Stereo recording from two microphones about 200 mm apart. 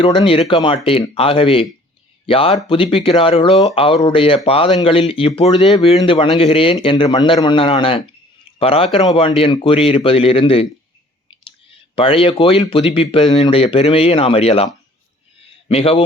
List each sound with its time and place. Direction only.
0.0 s speech: 25° left (ahead or behind)
11.3 s clicking: 25° left (ahead or behind)
12.6 s speech: 25° left (ahead or behind)
15.7 s speech: 30° left (ahead or behind)